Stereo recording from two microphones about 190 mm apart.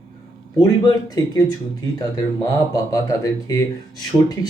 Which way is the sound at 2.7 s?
20° left (ahead or behind).